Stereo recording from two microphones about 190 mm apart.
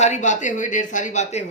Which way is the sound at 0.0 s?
40° left (ahead or behind).